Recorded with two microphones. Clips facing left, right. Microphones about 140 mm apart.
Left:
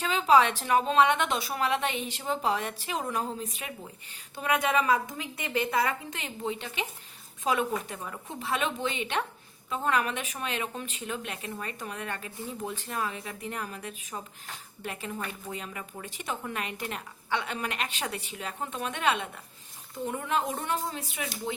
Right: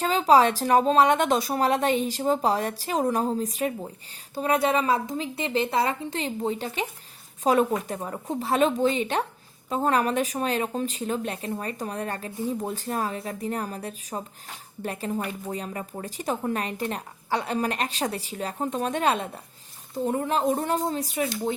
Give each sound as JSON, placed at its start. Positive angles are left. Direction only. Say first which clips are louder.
{"t": 0.0, "sound": "speech", "louder": "right 4 dB", "side_deg": -40}